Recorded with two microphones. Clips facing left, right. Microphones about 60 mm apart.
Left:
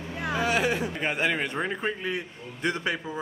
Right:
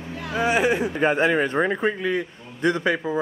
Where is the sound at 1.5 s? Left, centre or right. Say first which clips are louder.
Right 7 dB; right.